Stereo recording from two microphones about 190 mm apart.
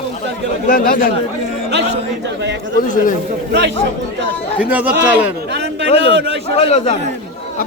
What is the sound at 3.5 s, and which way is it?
Speech, 65° right (ahead or behind).